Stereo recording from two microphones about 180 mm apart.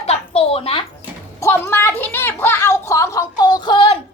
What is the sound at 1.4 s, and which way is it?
Speech, 15° left (ahead or behind).